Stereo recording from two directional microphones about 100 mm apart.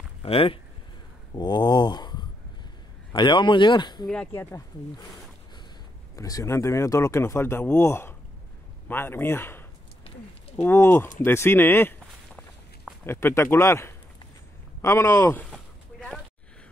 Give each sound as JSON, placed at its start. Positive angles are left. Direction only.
{"t": 0.2, "sound": "speech", "side_deg": 75}
{"t": 1.3, "sound": "speech", "side_deg": 45}
{"t": 4.3, "sound": "speech", "side_deg": 25}
{"t": 6.1, "sound": "speech", "side_deg": 35}
{"t": 13.0, "sound": "speech", "side_deg": 25}
{"t": 15.5, "sound": "a sound", "side_deg": 10}